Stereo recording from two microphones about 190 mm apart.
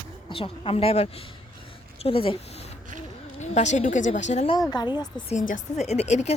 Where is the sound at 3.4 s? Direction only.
40° left (ahead or behind).